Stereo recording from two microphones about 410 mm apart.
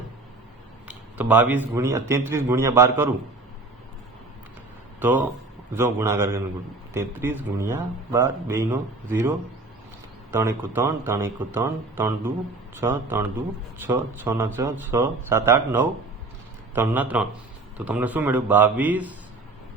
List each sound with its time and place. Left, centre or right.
0.9 s a man's voice: centre
4.9 s a man's voice: centre
10.3 s speech: centre